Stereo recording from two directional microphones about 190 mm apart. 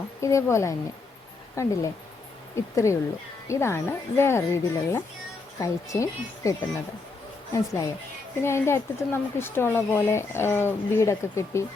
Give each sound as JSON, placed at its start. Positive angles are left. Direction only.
{"t": 0.2, "sound": "speech", "side_deg": 15}
{"t": 7.5, "sound": "speech", "side_deg": 15}